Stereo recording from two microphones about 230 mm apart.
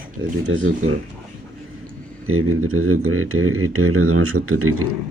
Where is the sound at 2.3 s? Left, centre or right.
Right.